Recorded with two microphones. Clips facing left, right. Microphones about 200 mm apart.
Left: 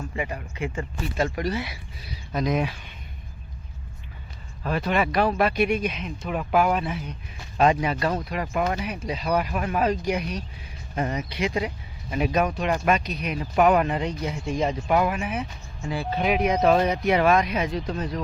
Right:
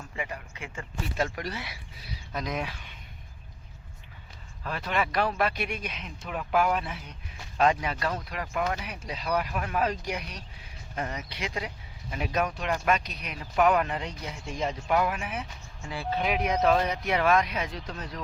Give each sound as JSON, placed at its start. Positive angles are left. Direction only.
{"t": 0.3, "sound": "speech", "side_deg": 25}
{"t": 1.4, "sound": "speech", "side_deg": 5}
{"t": 4.6, "sound": "speech", "side_deg": 15}